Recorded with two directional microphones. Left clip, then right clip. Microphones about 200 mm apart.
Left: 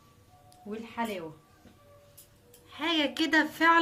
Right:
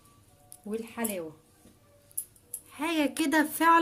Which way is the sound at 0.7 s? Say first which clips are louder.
Even; 50° right (ahead or behind).